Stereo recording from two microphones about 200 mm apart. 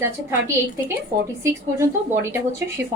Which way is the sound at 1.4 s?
15° right (ahead or behind).